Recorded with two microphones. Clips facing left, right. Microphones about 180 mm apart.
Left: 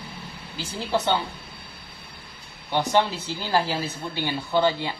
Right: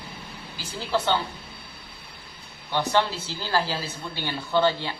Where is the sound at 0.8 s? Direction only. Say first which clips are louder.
Left 1 dB; 20° left (ahead or behind).